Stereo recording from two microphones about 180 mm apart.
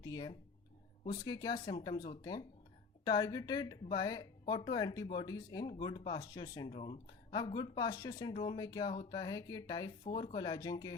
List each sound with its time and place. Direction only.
0.0 s speech: 20° left (ahead or behind)
10.0 s speech: 30° left (ahead or behind)